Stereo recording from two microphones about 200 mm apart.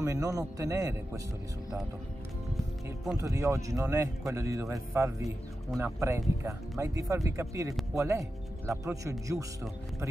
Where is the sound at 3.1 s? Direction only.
15° right (ahead or behind).